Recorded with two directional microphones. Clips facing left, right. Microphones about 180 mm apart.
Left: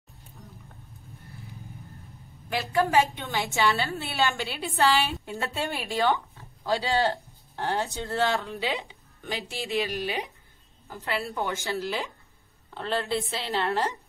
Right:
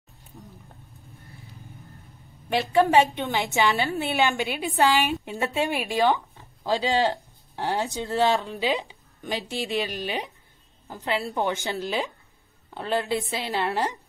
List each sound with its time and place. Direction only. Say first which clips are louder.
2.6 s a woman's voice: right 4 dB; 20° right (ahead or behind)